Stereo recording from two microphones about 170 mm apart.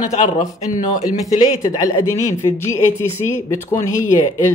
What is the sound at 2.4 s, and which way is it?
Speech, 15° left (ahead or behind).